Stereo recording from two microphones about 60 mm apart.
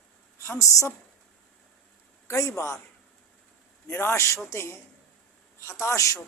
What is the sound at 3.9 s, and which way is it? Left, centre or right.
A man's voice, left.